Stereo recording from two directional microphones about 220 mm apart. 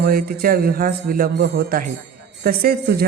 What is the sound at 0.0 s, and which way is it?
Speech, 40° right (ahead or behind).